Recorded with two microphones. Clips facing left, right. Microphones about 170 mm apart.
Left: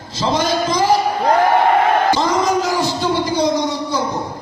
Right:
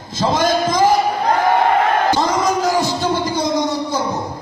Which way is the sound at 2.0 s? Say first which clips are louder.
Left 1 dB; 45° right (ahead or behind).